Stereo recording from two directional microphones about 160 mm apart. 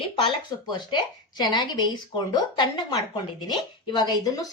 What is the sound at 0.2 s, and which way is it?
Speech, 30° left (ahead or behind).